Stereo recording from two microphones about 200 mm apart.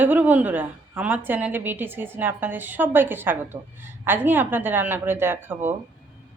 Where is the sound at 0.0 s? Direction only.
10° right (ahead or behind).